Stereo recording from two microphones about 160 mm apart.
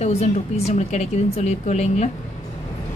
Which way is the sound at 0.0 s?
45° left (ahead or behind).